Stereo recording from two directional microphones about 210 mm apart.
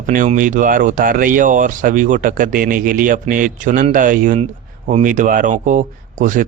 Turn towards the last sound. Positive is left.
turn(degrees=-40)  # may be behind; listen again after turning